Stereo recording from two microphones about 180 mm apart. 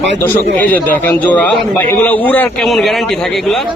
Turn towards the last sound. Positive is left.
turn(degrees=0)  # may be behind; listen again after turning